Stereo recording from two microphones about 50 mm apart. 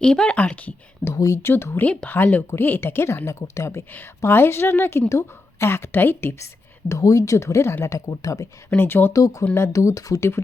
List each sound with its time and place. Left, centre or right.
0.0 s speech: centre
1.0 s speech: centre
1.4 s speech: left
1.8 s speech: left
2.0 s speech: left
3.2 s speech: left
4.3 s speech: left
5.0 s a woman's voice: left
5.6 s speech: left
6.4 s a woman's voice: left
8.7 s speech: left
9.6 s a woman's voice: left